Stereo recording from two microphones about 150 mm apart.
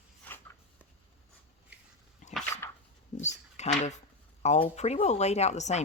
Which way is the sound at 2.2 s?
55° left (ahead or behind).